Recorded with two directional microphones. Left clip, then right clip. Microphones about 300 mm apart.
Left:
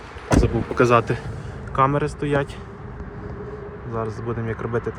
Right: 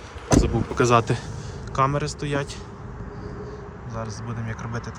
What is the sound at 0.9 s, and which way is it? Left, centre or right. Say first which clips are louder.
A man's voice: left 1 dB; centre.